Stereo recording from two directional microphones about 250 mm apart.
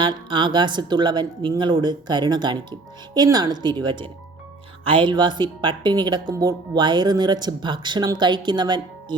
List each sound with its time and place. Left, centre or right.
0.0 s speech: centre